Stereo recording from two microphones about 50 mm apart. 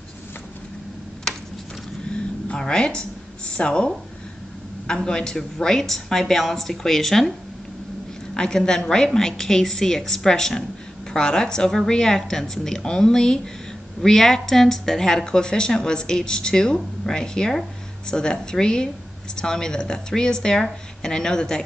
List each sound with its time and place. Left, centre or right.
2.0 s a sound: centre
4.8 s a woman's voice: centre
8.4 s a woman's voice: centre